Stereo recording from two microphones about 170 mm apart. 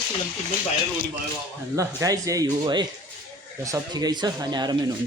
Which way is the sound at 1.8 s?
20° right (ahead or behind).